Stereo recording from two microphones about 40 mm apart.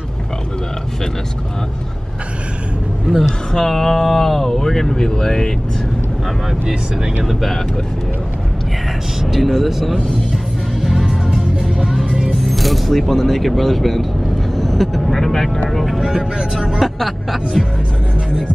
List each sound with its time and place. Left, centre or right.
3.5 s speech: centre
7.4 s speech: centre
9.2 s speech: centre
10.8 s music: centre
12.4 s speech: centre
16.0 s speech: centre
16.5 s speech: centre